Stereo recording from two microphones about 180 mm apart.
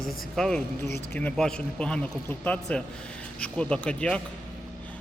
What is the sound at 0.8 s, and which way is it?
Speech, 15° left (ahead or behind).